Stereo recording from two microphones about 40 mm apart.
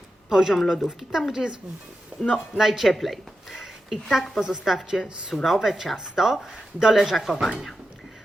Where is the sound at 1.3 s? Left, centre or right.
Centre.